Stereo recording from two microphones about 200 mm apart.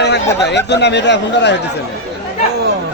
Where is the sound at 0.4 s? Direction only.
60° left (ahead or behind).